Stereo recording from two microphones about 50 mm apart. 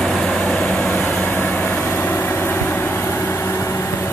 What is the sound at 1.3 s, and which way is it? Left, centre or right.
Vehicle, left.